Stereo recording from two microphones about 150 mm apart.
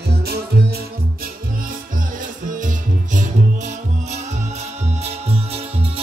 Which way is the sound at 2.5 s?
60° right (ahead or behind).